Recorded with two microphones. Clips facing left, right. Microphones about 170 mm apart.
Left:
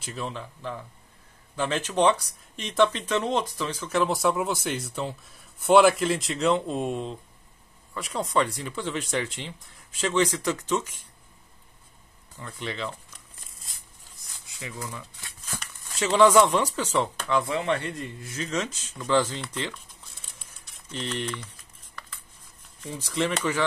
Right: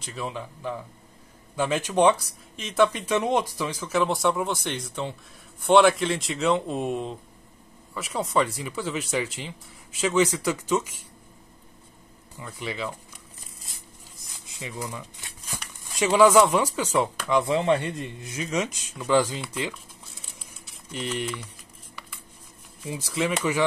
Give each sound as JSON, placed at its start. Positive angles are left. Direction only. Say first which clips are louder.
{"t": 0.0, "sound": "speech", "louder": "right 1 dB", "side_deg": 0}
{"t": 0.3, "sound": "a man's voice", "louder": "right 3 dB", "side_deg": -10}
{"t": 3.9, "sound": "a man's voice", "louder": "even", "side_deg": 0}
{"t": 12.4, "sound": "a man's voice", "louder": "right 1 dB", "side_deg": -10}
{"t": 14.5, "sound": "a man's voice", "louder": "right 2 dB", "side_deg": -20}
{"t": 22.8, "sound": "a man's voice", "louder": "even", "side_deg": -10}